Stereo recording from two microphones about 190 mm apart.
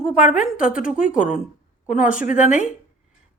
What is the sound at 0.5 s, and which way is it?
Speech, 45° left (ahead or behind).